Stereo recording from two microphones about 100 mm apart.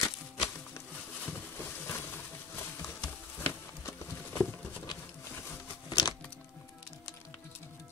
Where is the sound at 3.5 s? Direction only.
25° left (ahead or behind).